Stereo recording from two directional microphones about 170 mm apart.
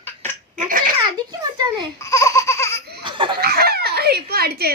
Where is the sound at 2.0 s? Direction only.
20° left (ahead or behind).